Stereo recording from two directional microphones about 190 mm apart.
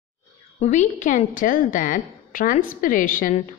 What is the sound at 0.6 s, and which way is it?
Speech, 40° left (ahead or behind).